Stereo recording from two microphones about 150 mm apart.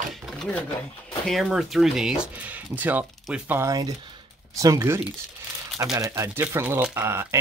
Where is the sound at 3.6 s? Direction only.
25° right (ahead or behind).